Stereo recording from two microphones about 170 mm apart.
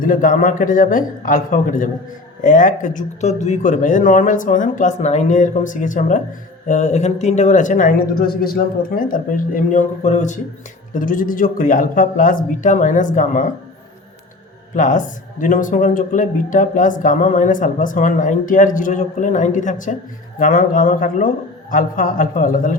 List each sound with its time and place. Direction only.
0.0 s speech: 55° left (ahead or behind)
10.9 s speech: 55° left (ahead or behind)
14.8 s speech: 50° left (ahead or behind)